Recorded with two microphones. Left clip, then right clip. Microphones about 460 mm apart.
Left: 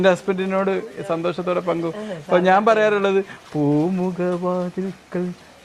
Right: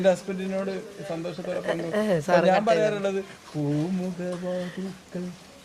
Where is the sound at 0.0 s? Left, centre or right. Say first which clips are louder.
Left 6 dB; left.